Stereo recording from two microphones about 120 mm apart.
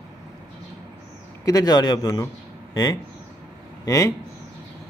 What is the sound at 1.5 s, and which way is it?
Speech, 35° left (ahead or behind).